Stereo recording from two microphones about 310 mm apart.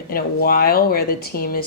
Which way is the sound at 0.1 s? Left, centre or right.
Left.